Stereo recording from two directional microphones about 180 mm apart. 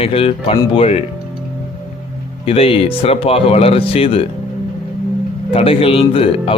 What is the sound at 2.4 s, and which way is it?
Speech, 30° left (ahead or behind).